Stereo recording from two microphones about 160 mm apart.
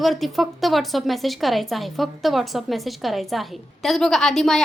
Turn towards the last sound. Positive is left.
turn(degrees=0)  # may be behind; listen again after turning